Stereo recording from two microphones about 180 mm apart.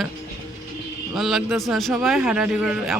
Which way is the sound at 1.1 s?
Centre (ahead or behind).